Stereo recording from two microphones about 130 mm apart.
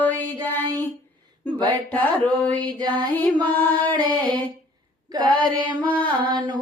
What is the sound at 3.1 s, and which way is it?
Music, 15° left (ahead or behind).